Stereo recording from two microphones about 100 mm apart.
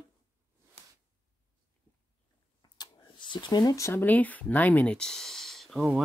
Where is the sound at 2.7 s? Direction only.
50° left (ahead or behind); by 4.0 s 30° left (ahead or behind).